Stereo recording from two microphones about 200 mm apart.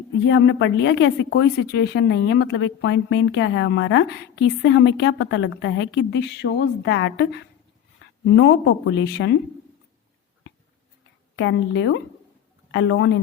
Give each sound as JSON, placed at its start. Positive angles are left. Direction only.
{"t": 0.3, "sound": "a woman's voice", "side_deg": 65}
{"t": 11.3, "sound": "a woman's voice", "side_deg": 65}